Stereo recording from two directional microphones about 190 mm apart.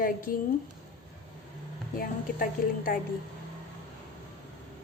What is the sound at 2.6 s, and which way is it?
Speech, 45° left (ahead or behind).